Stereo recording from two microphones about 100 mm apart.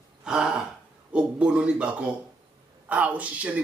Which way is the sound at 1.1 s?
10° right (ahead or behind).